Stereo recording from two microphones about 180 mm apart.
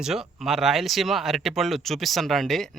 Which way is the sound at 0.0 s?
Centre (ahead or behind).